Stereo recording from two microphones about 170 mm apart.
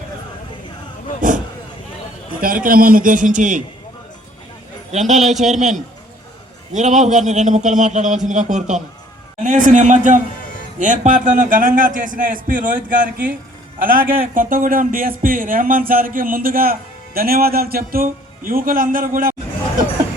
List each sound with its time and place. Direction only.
2.4 s a man's voice: 55° right (ahead or behind)
4.9 s a man's voice: 45° right (ahead or behind)
13.8 s speech: 55° right (ahead or behind)